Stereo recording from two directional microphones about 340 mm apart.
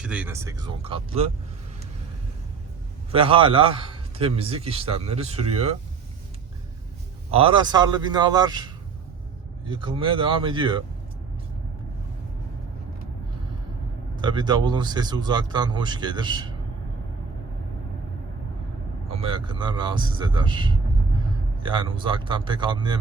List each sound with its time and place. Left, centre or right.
0.0 s a man's voice: centre
3.1 s a man's voice: centre
7.3 s a man's voice: centre
14.2 s a man's voice: centre
19.1 s a man's voice: centre